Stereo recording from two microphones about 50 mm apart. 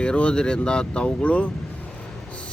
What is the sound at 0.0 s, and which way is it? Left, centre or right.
Speech, left.